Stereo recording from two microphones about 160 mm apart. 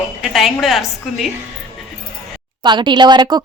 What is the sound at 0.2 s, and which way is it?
Speech, centre (ahead or behind).